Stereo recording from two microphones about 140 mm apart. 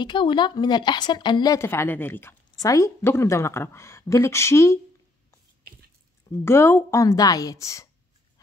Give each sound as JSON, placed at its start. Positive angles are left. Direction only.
{"t": 0.0, "sound": "a woman's voice", "side_deg": 35}
{"t": 6.4, "sound": "a woman's voice", "side_deg": 20}